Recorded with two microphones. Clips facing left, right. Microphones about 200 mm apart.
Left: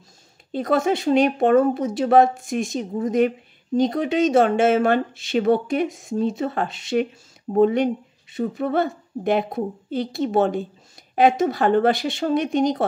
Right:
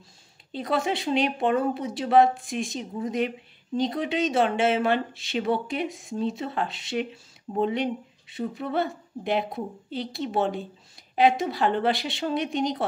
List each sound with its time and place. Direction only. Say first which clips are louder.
0.5 s speech: left 6 dB; 45° left (ahead or behind)